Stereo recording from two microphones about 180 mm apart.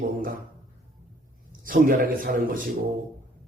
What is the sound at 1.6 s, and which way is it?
Speech, 50° right (ahead or behind).